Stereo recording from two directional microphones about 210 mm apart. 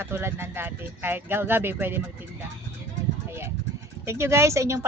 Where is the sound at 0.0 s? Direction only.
10° right (ahead or behind).